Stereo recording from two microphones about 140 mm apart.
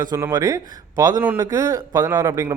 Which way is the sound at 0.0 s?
25° right (ahead or behind).